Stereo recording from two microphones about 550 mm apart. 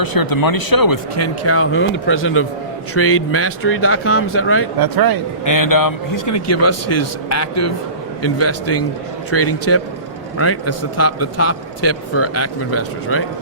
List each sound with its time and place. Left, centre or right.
0.0 s a man's voice: left
4.8 s speech: right
5.5 s a man's voice: left